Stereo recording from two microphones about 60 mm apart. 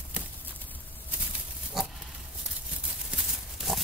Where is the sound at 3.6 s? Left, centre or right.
Centre.